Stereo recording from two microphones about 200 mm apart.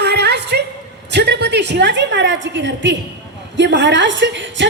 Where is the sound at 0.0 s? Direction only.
55° right (ahead or behind).